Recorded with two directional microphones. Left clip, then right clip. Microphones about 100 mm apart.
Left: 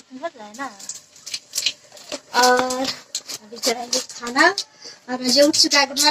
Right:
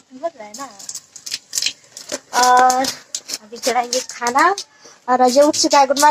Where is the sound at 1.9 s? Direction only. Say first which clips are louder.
Right 2 dB; 30° right (ahead or behind).